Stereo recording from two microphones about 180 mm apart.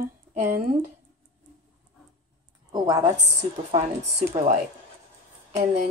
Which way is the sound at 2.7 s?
20° right (ahead or behind).